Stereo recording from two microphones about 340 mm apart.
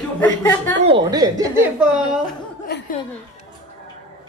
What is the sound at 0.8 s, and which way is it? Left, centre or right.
Speech, centre.